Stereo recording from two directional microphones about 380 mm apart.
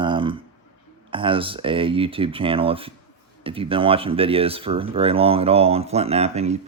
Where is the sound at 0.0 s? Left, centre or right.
Centre.